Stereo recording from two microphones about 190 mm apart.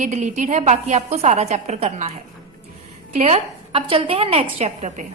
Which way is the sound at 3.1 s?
35° right (ahead or behind).